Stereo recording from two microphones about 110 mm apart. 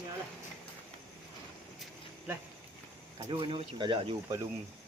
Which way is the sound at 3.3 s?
50° right (ahead or behind).